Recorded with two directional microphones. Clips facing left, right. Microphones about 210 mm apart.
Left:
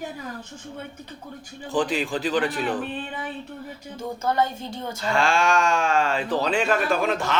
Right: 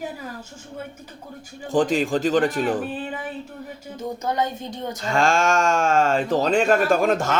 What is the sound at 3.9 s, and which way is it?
Speech, 20° right (ahead or behind).